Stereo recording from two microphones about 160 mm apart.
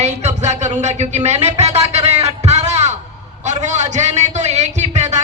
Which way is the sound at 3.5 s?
45° right (ahead or behind).